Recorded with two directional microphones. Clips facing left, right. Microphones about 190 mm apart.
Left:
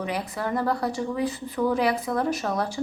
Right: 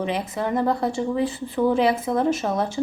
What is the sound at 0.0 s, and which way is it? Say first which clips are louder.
A woman's voice: right 4 dB; 25° right (ahead or behind).